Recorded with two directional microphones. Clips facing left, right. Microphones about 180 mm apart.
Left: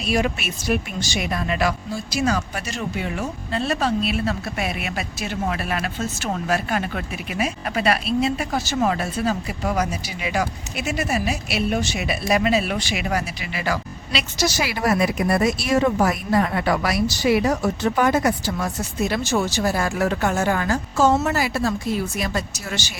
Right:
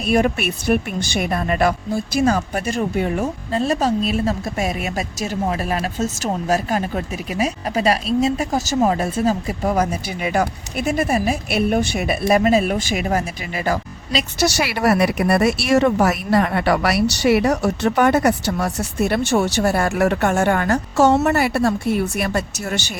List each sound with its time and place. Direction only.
0.0 s a woman's voice: 55° right (ahead or behind); by 9.0 s 35° right (ahead or behind)
9.0 s a woman's voice: 50° right (ahead or behind)
14.3 s speech: 65° right (ahead or behind)